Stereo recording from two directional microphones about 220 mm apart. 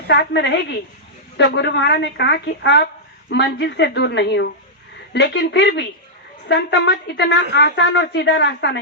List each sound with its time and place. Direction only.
0.1 s a woman's voice: 50° left (ahead or behind)